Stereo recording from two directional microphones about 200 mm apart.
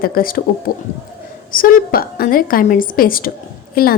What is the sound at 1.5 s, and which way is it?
A woman's voice, 45° left (ahead or behind).